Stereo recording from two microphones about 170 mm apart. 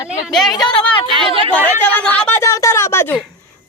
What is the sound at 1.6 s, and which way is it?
Speech, 10° left (ahead or behind).